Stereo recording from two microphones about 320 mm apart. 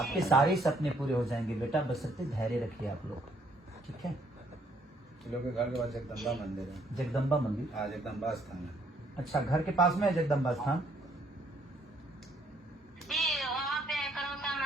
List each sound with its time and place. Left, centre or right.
0.0 s a man's voice: centre
5.2 s a man's voice: centre
13.1 s a sound: centre